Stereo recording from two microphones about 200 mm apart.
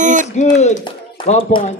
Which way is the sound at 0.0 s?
40° right (ahead or behind).